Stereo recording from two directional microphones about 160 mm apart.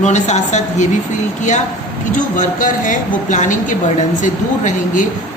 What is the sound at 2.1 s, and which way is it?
A woman's voice, 55° left (ahead or behind).